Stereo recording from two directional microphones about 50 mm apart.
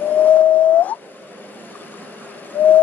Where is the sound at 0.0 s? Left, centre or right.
Left.